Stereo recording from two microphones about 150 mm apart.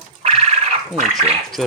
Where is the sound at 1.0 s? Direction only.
55° right (ahead or behind).